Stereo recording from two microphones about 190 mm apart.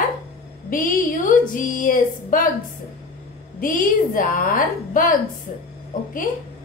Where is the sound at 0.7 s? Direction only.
45° left (ahead or behind).